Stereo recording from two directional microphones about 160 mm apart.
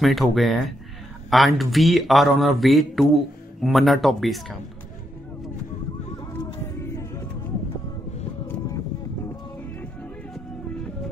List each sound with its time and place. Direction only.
0.0 s a man's voice: centre (ahead or behind)
6.6 s music: 15° left (ahead or behind)